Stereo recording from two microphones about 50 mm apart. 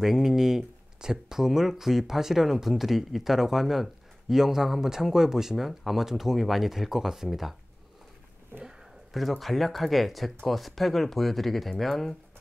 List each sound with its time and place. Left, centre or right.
0.0 s speech: centre
8.5 s speech: right
9.1 s speech: centre